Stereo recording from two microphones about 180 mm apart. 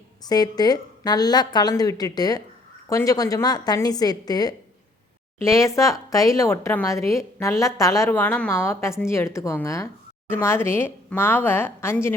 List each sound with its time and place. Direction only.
0.3 s a woman's voice: 20° left (ahead or behind)